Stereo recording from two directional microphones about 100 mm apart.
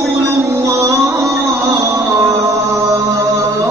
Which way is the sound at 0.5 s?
30° right (ahead or behind).